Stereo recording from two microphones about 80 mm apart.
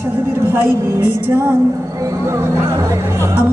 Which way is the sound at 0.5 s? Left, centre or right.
Right.